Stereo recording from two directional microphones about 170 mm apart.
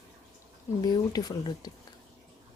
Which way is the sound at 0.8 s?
25° left (ahead or behind).